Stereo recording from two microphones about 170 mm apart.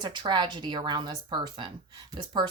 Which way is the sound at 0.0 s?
25° right (ahead or behind).